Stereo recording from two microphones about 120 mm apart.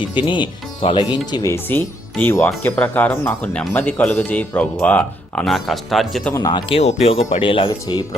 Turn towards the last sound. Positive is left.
turn(degrees=45)  # may be behind; listen again after turning